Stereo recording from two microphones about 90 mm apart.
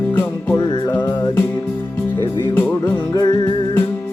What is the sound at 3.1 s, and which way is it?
Music, 50° left (ahead or behind).